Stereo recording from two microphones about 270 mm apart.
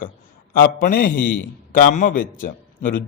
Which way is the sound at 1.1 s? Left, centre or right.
Left.